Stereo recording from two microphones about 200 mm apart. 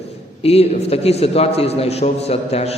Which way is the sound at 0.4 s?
30° left (ahead or behind).